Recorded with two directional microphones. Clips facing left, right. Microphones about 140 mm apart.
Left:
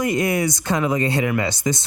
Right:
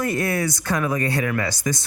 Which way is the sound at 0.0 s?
15° left (ahead or behind).